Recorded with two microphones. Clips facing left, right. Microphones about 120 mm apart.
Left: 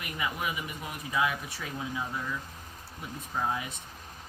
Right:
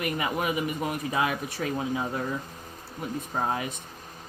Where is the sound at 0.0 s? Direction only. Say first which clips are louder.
Right 6 dB; 55° right (ahead or behind).